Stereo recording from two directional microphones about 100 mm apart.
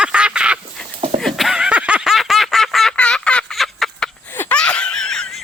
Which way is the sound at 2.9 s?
10° left (ahead or behind).